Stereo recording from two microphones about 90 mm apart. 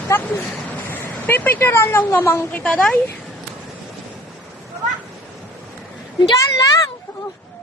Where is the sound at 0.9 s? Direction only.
20° left (ahead or behind).